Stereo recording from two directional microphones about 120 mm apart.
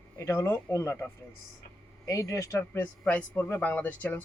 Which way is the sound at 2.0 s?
25° left (ahead or behind).